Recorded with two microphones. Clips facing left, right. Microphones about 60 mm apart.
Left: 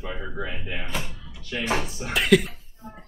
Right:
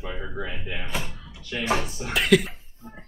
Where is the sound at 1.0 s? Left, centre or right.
Right.